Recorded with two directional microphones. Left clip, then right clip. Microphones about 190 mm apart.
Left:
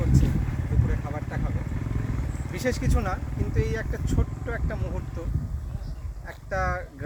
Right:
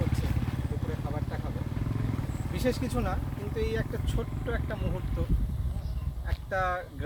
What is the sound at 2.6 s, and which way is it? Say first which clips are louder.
Speech: left 2 dB; 15° left (ahead or behind).